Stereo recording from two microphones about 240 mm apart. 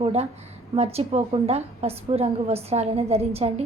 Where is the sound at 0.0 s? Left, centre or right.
Right.